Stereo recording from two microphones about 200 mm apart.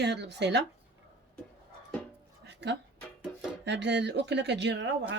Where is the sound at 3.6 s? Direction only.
60° right (ahead or behind).